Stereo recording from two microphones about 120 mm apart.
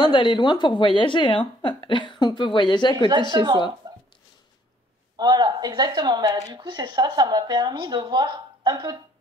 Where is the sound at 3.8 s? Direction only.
30° right (ahead or behind).